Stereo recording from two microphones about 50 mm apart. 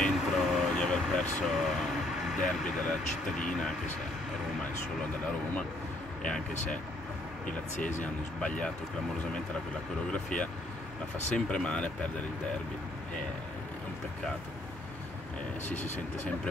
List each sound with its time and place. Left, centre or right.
0.1 s vehicle: centre
0.7 s vehicle: centre
1.4 s speech: centre
2.8 s speech: centre
6.2 s speech: left
7.8 s speech: left
10.1 s speech: left